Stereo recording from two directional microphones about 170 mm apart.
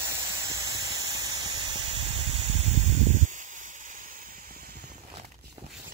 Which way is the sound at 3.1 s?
50° right (ahead or behind).